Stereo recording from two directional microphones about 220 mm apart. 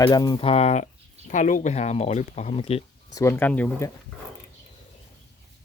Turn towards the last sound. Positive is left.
turn(degrees=5)  # may be behind; listen again after turning